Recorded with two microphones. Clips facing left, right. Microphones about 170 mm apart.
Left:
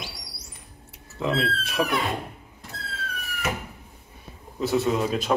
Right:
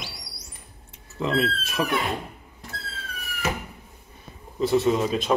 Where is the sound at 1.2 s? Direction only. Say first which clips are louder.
Right 1 dB; centre (ahead or behind).